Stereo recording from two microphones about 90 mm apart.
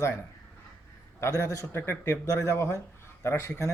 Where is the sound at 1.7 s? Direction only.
25° left (ahead or behind).